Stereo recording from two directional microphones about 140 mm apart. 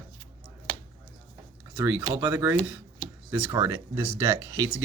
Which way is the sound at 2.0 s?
15° right (ahead or behind).